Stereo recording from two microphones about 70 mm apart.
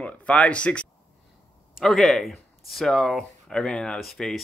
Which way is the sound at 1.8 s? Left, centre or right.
Centre.